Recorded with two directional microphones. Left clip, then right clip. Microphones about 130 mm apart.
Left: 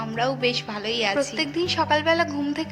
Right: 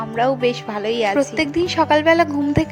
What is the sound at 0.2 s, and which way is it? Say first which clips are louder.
Speech: right 6 dB; 55° right (ahead or behind).